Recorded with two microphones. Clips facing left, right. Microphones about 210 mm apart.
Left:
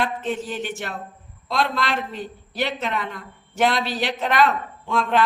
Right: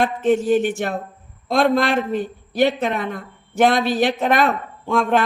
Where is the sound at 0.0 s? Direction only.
45° right (ahead or behind).